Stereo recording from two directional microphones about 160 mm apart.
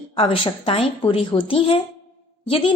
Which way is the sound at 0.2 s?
35° left (ahead or behind).